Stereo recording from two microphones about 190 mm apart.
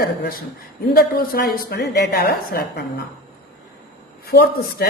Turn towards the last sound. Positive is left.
turn(degrees=55)  # may be behind; listen again after turning